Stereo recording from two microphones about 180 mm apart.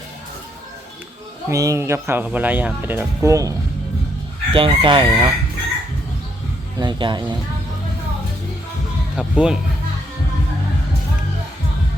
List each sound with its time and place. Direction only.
1.5 s speech: 20° right (ahead or behind)
4.5 s chicken: 30° right (ahead or behind)
6.7 s chicken: 25° right (ahead or behind)
9.1 s speech: 5° right (ahead or behind)